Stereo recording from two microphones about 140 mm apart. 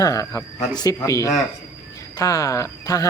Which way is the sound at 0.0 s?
25° left (ahead or behind).